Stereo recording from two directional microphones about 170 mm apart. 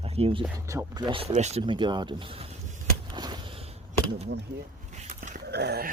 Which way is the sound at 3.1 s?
25° right (ahead or behind).